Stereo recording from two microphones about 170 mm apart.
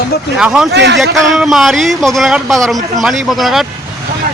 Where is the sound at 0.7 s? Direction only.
90° right.